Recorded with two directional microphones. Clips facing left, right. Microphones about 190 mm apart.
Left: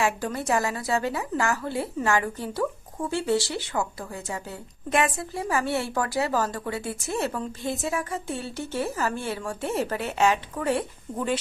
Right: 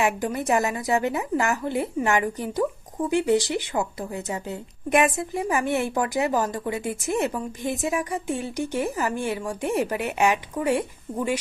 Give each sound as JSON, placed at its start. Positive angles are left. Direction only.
{"t": 0.0, "sound": "a woman's voice", "side_deg": -15}